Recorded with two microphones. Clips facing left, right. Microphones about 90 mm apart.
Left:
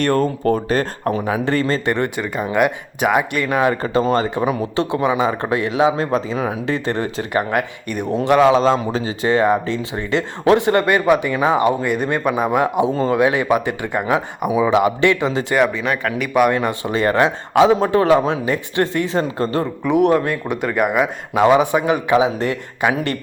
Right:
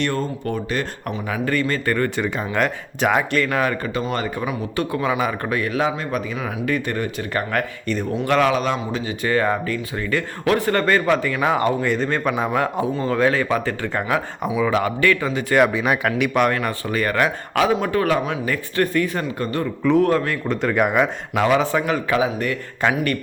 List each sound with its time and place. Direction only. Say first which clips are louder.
0.0 s speech: left 6 dB; 45° left (ahead or behind); by 2.0 s 20° left (ahead or behind)
2.1 s speech: left 3 dB; 5° left (ahead or behind)
3.8 s speech: left 7 dB; 35° left (ahead or behind)
7.5 s speech: left 2 dB; 15° left (ahead or behind); by 9.1 s 30° left (ahead or behind)
9.2 s speech: left 4 dB; 20° left (ahead or behind)
15.5 s speech: right 3 dB; 5° right (ahead or behind)
16.5 s speech: left 4 dB; 20° left (ahead or behind); by 21.1 s 5° left (ahead or behind)
21.3 s speech: left 5 dB; 20° left (ahead or behind)
22.8 s speech: left 2 dB; 15° left (ahead or behind)